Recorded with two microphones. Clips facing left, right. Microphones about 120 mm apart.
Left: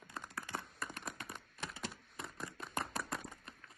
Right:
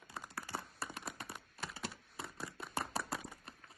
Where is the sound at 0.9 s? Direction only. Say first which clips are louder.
Even; centre (ahead or behind).